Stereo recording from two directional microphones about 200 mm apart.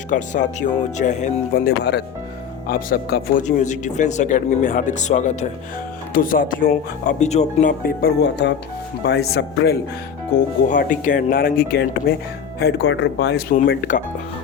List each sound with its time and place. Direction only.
0.1 s speech: 40° left (ahead or behind)
3.4 s speech: 35° left (ahead or behind)
8.2 s speech: 60° left (ahead or behind)
10.7 s speech: 40° left (ahead or behind); by 13.4 s 60° left (ahead or behind)
13.5 s speech: 40° left (ahead or behind)